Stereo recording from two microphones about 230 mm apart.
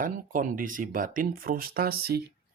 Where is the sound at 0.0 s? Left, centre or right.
Right.